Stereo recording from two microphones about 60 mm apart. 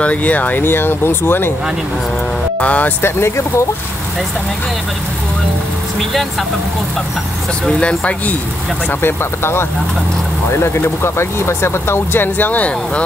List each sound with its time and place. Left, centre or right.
0.0 s speech: left
2.6 s speech: left
3.0 s speech: left
7.8 s speech: centre
9.0 s speech: left